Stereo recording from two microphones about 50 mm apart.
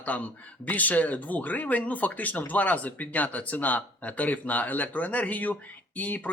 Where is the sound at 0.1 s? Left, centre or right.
Left.